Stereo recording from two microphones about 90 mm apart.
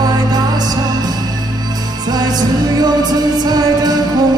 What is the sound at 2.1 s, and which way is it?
Music, 50° right (ahead or behind).